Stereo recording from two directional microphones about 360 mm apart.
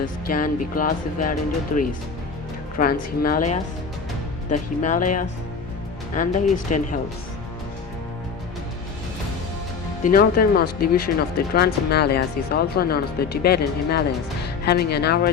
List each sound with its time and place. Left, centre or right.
0.0 s speech: left
10.0 s speech: left